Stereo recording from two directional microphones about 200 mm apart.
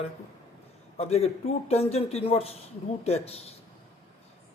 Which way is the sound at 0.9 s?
30° left (ahead or behind).